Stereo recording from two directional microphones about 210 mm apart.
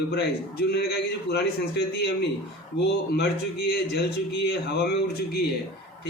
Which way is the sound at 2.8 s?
50° left (ahead or behind).